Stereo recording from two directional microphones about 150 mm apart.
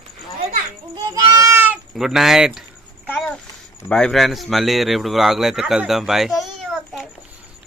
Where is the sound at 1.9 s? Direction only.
Centre (ahead or behind).